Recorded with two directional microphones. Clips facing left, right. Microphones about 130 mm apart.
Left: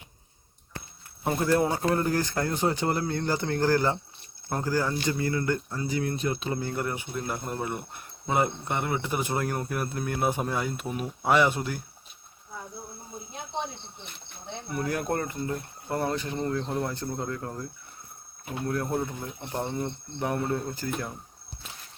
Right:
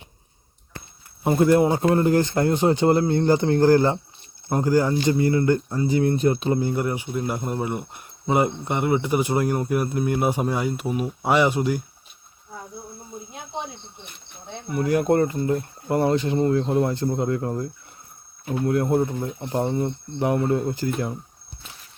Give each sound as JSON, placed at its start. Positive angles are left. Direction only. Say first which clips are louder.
{"t": 1.2, "sound": "speech", "louder": "right 7 dB", "side_deg": -15}
{"t": 6.6, "sound": "speech", "louder": "right 7 dB", "side_deg": -15}
{"t": 14.5, "sound": "speech", "louder": "right 8 dB", "side_deg": -10}
{"t": 15.0, "sound": "speech", "louder": "right 9 dB", "side_deg": -30}
{"t": 20.1, "sound": "speech", "louder": "right 7 dB", "side_deg": -15}